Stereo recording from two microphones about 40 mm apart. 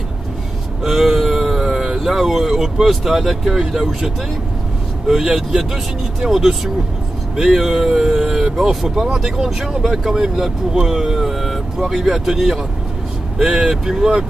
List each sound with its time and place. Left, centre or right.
0.8 s a sound: centre
2.0 s speech: centre
5.0 s speech: centre